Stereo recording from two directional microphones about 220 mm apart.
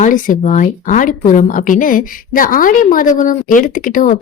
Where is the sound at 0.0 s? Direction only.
35° left (ahead or behind).